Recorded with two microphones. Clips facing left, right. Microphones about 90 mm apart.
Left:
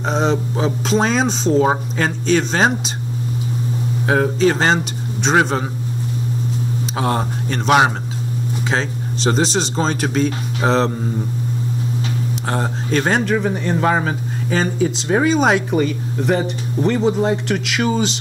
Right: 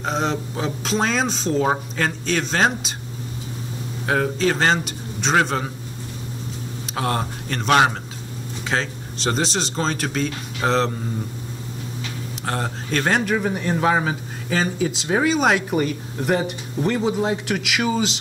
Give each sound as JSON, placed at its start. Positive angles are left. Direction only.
{"t": 0.1, "sound": "speech", "side_deg": 0}
{"t": 4.1, "sound": "speech", "side_deg": 5}
{"t": 7.0, "sound": "speech", "side_deg": 5}
{"t": 12.4, "sound": "speech", "side_deg": 5}